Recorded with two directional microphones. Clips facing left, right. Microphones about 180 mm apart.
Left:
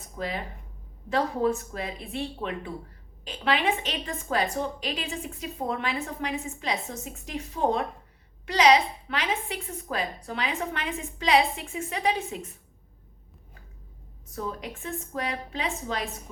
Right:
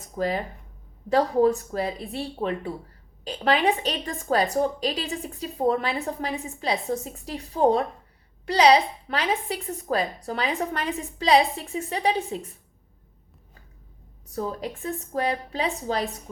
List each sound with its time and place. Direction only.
0.2 s a woman's voice: 40° right (ahead or behind)
14.3 s a woman's voice: 35° right (ahead or behind)